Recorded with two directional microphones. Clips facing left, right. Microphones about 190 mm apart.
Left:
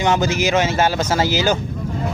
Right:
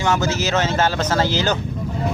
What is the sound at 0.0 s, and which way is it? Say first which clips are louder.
Speech: left 2 dB; 20° left (ahead or behind).